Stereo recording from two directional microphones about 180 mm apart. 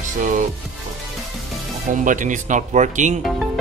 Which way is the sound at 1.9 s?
45° right (ahead or behind).